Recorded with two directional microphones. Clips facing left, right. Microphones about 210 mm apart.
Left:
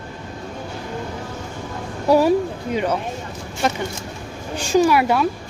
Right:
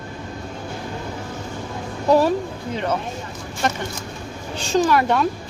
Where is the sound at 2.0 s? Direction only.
10° left (ahead or behind).